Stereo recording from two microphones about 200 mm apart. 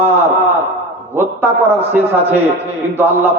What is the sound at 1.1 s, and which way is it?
Speech, 10° right (ahead or behind).